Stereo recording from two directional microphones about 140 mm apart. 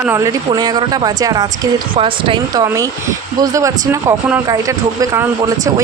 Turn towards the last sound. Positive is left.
turn(degrees=-25)  # may be behind; listen again after turning